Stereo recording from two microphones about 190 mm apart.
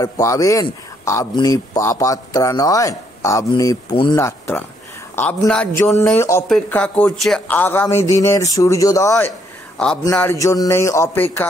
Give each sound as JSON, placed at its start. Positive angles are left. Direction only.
{"t": 0.0, "sound": "a man's voice", "side_deg": 15}
{"t": 4.2, "sound": "a man's voice", "side_deg": 10}